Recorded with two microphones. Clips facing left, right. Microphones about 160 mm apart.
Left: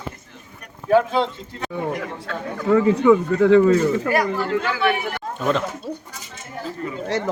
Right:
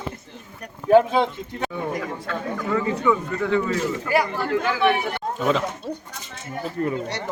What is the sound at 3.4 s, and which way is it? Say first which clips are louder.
Speech: left 9 dB; 90° left.